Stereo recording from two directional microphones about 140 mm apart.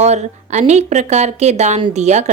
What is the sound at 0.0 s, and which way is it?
A woman's voice, 55° right (ahead or behind).